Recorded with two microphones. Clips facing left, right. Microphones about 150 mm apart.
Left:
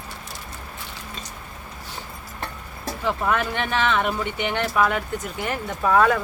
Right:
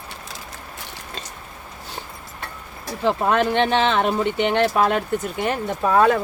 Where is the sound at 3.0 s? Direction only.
30° right (ahead or behind).